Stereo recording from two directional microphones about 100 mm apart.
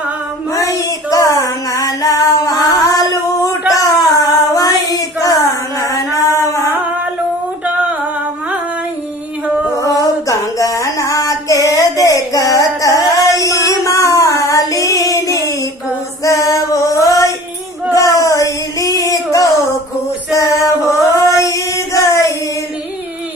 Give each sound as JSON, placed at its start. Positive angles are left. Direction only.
{"t": 0.5, "sound": "female singing", "side_deg": 35}
{"t": 3.7, "sound": "child singing", "side_deg": 35}
{"t": 9.8, "sound": "female singing", "side_deg": 35}
{"t": 16.2, "sound": "music", "side_deg": 35}
{"t": 17.9, "sound": "a sound", "side_deg": 35}
{"t": 20.3, "sound": "music", "side_deg": 35}
{"t": 21.2, "sound": "a sound", "side_deg": 35}